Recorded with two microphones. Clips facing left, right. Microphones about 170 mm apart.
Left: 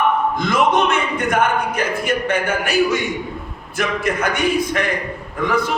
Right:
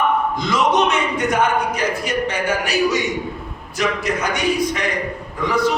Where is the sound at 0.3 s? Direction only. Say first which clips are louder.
Left 1 dB; 55° left (ahead or behind).